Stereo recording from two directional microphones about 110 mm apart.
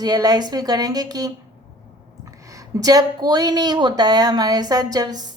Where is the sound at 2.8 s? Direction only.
35° right (ahead or behind).